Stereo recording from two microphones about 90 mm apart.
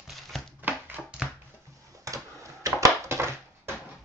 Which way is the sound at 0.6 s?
20° right (ahead or behind).